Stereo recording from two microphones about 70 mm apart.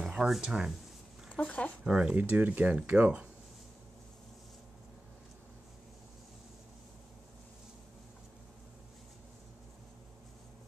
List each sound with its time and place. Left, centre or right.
0.0 s a sound: centre
0.3 s speech: centre
1.4 s speech: centre
1.9 s speech: centre
2.1 s speech: right